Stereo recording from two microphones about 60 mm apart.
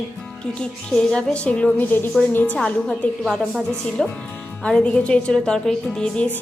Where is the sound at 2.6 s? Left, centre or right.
Centre.